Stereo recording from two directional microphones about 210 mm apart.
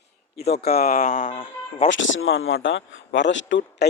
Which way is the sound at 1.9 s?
65° left (ahead or behind).